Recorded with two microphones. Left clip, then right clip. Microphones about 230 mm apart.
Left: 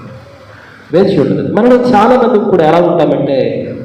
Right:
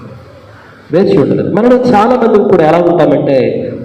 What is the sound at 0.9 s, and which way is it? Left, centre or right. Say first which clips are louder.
A man's voice: right 1 dB; right.